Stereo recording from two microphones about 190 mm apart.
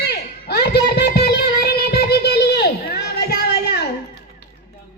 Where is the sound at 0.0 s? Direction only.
60° left (ahead or behind).